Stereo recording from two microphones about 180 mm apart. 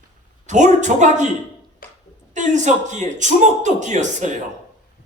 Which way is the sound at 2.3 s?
40° right (ahead or behind).